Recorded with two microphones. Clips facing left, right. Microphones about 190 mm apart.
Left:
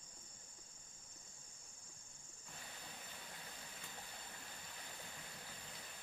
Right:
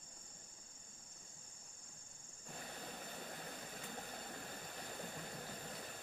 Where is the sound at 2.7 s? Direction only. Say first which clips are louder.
Right 7 dB; 50° right (ahead or behind).